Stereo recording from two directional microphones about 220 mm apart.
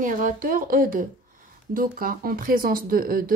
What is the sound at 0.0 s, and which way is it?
Speech, 35° right (ahead or behind).